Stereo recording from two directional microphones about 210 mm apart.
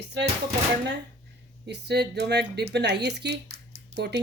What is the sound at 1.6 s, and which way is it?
Speech, 55° right (ahead or behind).